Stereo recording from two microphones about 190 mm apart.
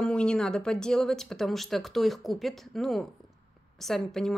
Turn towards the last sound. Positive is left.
turn(degrees=0)  # may be behind; listen again after turning